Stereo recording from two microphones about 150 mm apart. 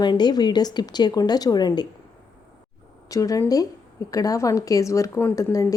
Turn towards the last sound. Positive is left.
turn(degrees=20)  # may be behind; listen again after turning